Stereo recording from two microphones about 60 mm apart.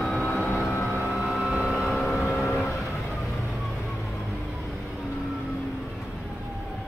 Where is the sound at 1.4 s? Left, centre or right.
Centre.